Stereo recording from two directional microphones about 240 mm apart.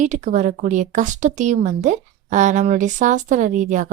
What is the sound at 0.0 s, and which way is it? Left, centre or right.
A woman's voice, right.